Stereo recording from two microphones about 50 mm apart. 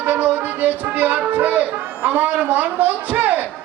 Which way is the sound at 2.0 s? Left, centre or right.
Right.